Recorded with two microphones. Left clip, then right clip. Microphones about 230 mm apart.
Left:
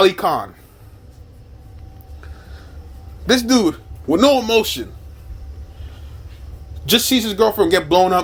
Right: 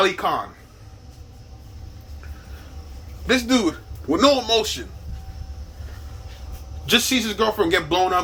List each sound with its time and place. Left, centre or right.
0.0 s speech: left
3.2 s a man's voice: left
6.8 s a man's voice: left